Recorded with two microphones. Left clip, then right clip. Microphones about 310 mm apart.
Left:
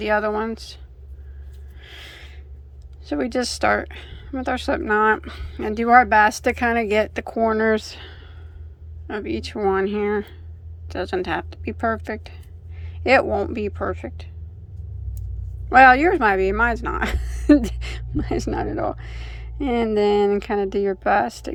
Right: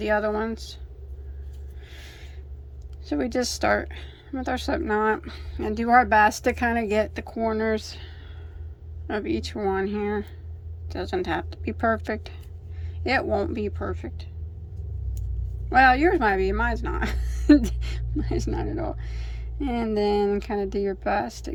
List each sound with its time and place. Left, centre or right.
0.0 s speech: centre
1.8 s a sound: centre
3.0 s a woman's voice: centre
15.7 s a woman's voice: centre